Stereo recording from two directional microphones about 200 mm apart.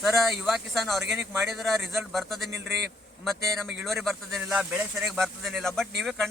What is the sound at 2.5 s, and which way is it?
Speech, 60° right (ahead or behind).